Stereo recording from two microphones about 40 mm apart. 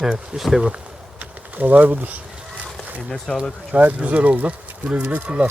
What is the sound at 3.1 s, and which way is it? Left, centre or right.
Speech, centre.